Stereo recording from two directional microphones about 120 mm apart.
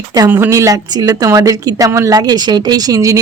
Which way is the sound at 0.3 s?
20° right (ahead or behind).